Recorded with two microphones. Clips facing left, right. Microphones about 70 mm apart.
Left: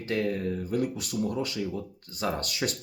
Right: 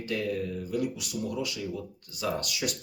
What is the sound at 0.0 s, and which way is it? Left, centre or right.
Speech, left.